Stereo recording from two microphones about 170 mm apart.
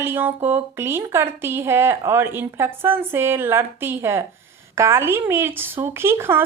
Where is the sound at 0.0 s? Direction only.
10° right (ahead or behind).